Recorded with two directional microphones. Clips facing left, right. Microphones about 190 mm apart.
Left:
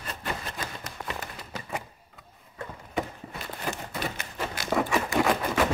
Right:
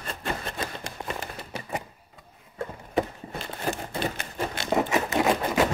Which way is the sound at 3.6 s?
30° right (ahead or behind).